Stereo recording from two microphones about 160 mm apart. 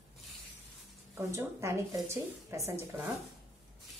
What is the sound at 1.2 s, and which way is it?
Speech, 15° right (ahead or behind).